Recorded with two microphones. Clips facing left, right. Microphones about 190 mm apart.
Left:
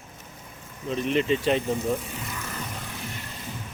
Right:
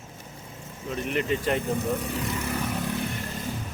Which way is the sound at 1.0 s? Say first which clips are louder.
Left 3 dB; 25° left (ahead or behind).